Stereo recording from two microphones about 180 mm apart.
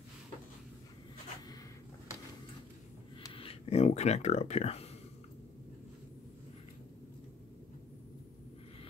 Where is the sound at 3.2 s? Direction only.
30° left (ahead or behind).